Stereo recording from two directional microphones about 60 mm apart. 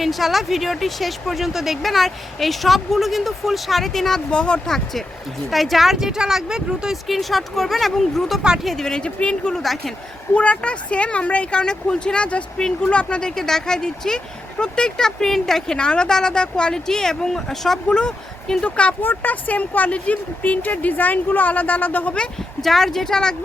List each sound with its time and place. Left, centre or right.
0.0 s speech: centre
4.3 s speech: centre
5.5 s speech: centre
6.9 s speech: centre
10.3 s speech: centre
22.6 s speech: centre